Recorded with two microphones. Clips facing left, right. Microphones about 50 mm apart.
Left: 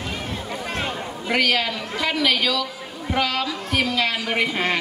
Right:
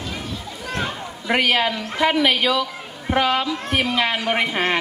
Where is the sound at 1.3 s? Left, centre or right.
Right.